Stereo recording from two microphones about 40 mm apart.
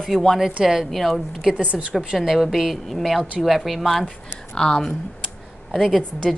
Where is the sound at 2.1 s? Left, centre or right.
Centre.